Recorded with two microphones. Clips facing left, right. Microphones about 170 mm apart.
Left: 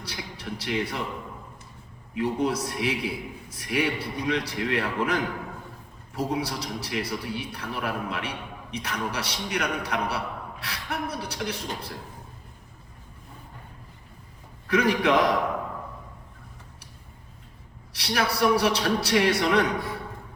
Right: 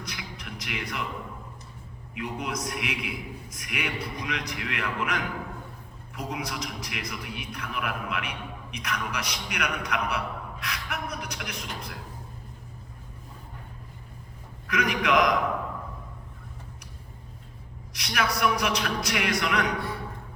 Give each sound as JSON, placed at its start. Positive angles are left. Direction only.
{"t": 0.0, "sound": "a sound", "side_deg": 30}
{"t": 2.1, "sound": "a man's voice", "side_deg": 35}
{"t": 14.7, "sound": "a man's voice", "side_deg": 30}
{"t": 17.9, "sound": "a man's voice", "side_deg": 30}